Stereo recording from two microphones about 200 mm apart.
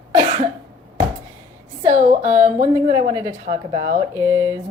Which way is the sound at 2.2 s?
10° right (ahead or behind).